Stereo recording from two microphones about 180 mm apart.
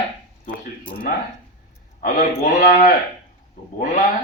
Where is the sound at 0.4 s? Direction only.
50° left (ahead or behind).